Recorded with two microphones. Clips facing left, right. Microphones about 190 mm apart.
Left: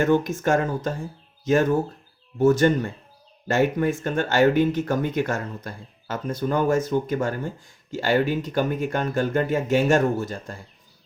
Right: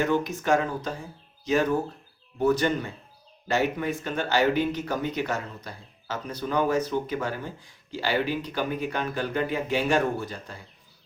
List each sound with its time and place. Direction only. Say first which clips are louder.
0.0 s speech: left 5 dB; 50° left (ahead or behind)
2.4 s speech: left 5 dB; 45° left (ahead or behind)